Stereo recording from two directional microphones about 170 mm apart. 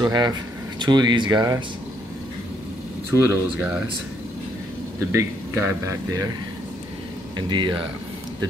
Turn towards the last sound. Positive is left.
turn(degrees=-30)  # may be behind; listen again after turning